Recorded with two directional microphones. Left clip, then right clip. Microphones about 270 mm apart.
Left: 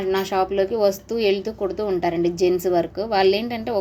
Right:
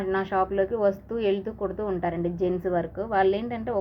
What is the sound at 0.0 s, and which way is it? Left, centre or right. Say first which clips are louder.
Speech: left 4 dB; left.